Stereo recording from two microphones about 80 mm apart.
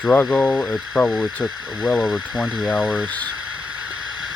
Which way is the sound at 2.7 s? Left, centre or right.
Left.